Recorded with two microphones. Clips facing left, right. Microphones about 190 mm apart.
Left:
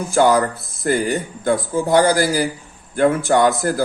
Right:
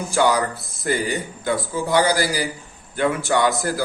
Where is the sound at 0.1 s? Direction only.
55° left (ahead or behind).